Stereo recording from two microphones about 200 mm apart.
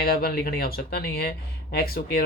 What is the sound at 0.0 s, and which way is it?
Speech, 50° left (ahead or behind).